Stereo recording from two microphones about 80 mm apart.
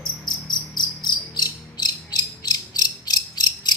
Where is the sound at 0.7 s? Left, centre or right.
Left.